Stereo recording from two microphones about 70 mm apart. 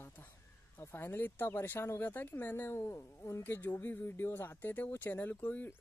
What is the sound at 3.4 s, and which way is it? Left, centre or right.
Speech, left.